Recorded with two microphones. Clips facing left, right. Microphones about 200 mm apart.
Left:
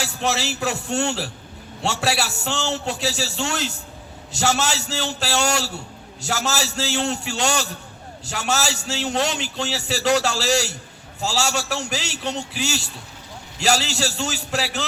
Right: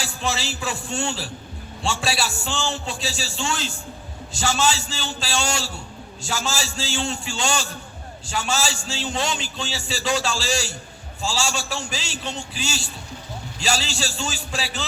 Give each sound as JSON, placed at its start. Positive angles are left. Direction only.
{"t": 0.2, "sound": "a man's voice", "side_deg": 70}